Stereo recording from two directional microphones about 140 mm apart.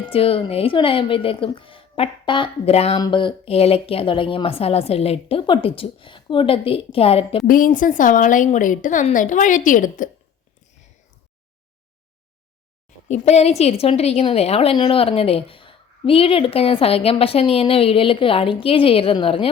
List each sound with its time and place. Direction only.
0.0 s a woman's voice: 40° left (ahead or behind)
3.0 s a woman's voice: 35° left (ahead or behind)
7.4 s a woman's voice: 85° left
13.1 s a woman's voice: 50° left (ahead or behind)